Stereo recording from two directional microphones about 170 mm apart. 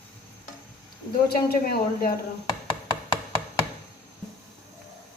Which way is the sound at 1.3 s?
65° left (ahead or behind).